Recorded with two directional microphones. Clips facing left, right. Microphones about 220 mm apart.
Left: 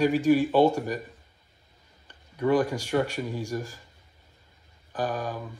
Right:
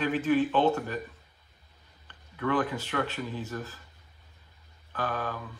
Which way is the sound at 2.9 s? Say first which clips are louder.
Left 6 dB; 10° left (ahead or behind).